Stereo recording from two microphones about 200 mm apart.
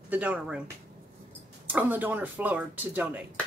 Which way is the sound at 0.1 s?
5° right (ahead or behind).